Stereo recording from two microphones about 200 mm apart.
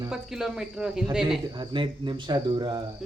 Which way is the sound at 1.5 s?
25° right (ahead or behind).